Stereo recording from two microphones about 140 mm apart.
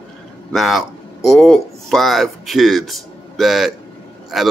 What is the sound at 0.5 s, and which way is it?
A man's voice, centre (ahead or behind).